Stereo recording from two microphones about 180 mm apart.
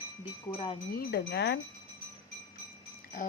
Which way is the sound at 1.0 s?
65° left (ahead or behind).